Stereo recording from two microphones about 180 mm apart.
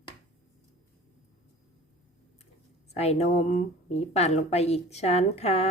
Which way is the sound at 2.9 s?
35° left (ahead or behind).